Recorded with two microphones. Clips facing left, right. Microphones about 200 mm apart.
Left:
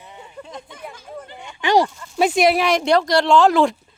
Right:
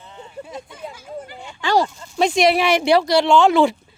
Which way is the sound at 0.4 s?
5° right (ahead or behind).